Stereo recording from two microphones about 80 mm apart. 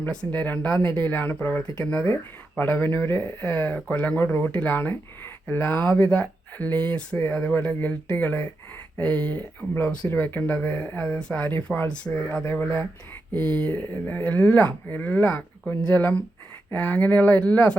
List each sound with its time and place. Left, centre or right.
0.3 s speech: left
11.5 s speech: left
11.9 s speech: centre
13.3 s speech: right
13.7 s speech: left